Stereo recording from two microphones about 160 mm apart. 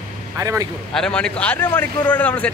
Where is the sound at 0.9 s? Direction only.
5° left (ahead or behind).